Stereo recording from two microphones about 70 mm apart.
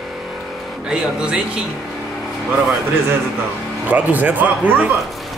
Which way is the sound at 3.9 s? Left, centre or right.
Right.